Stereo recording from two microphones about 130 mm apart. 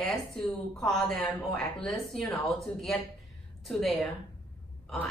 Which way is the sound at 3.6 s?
Centre (ahead or behind).